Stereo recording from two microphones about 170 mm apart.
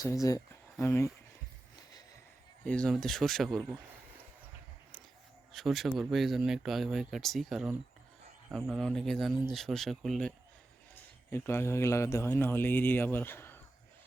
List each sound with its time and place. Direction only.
0.0 s speech: 20° left (ahead or behind)
2.6 s speech: 5° left (ahead or behind)
5.5 s speech: centre (ahead or behind)
11.3 s a man's voice: 15° left (ahead or behind)